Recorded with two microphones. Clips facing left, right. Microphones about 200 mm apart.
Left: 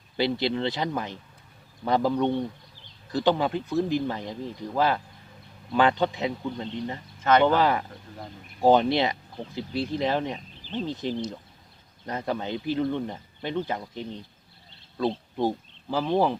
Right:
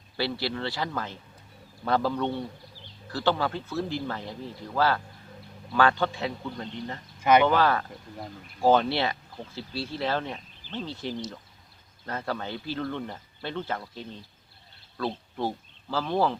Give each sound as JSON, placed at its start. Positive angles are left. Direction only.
{"t": 0.2, "sound": "speech", "side_deg": 20}
{"t": 7.2, "sound": "speech", "side_deg": -10}
{"t": 7.4, "sound": "speech", "side_deg": 15}